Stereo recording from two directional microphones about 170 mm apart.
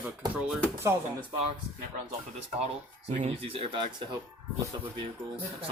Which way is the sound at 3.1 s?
40° right (ahead or behind).